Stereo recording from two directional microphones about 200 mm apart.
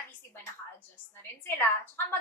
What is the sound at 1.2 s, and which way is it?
Speech, 10° left (ahead or behind).